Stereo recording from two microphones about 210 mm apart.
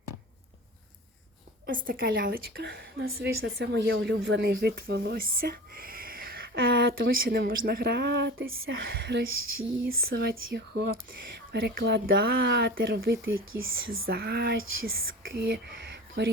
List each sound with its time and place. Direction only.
1.6 s speech: 45° right (ahead or behind); by 9.2 s 60° right (ahead or behind)
9.9 s speech: 70° right (ahead or behind)
10.2 s speech: 50° right (ahead or behind)
13.2 s speech: 70° right (ahead or behind)
14.1 s speech: 50° right (ahead or behind)